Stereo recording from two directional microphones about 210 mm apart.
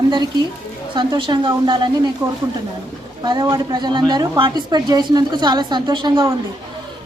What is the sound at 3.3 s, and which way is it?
A woman's voice, 20° right (ahead or behind).